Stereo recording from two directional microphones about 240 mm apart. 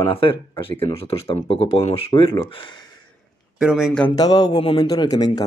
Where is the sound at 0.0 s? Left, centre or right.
Left.